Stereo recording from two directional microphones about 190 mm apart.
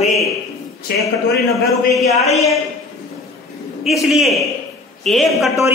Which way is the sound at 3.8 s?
Centre (ahead or behind).